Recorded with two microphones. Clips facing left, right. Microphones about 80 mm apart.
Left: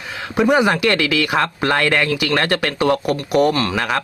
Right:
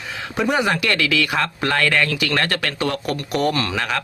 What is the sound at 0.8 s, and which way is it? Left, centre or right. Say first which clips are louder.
Speech: left 3 dB; left.